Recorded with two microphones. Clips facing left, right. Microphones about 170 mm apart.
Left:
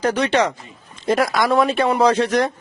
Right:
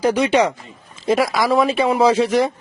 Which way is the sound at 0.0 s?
10° right (ahead or behind).